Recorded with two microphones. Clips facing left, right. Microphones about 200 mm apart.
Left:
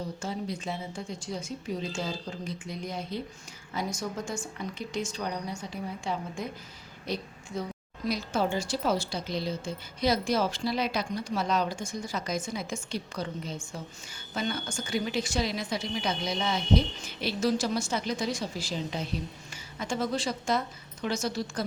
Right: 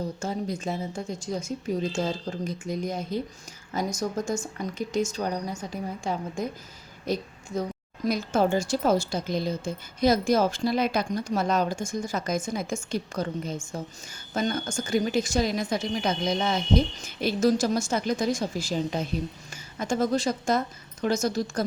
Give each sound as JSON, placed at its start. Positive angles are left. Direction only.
{"t": 0.2, "sound": "speech", "side_deg": -45}